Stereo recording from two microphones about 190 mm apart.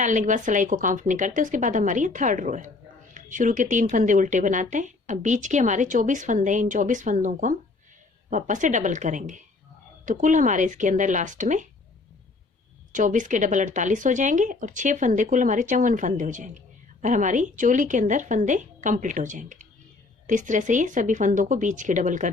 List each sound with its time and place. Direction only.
0.0 s a woman's voice: 40° right (ahead or behind)
12.9 s a woman's voice: 40° right (ahead or behind)